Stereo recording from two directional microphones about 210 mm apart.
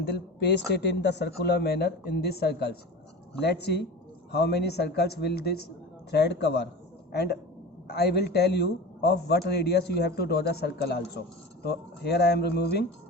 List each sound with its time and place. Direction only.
0.0 s a man's voice: 50° left (ahead or behind)